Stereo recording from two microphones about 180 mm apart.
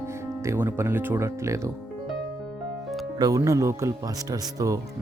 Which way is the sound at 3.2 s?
20° right (ahead or behind).